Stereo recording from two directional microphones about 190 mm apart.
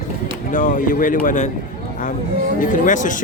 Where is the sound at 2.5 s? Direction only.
45° left (ahead or behind).